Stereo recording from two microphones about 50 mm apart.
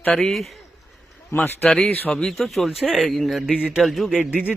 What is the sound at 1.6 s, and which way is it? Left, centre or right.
Speech, centre.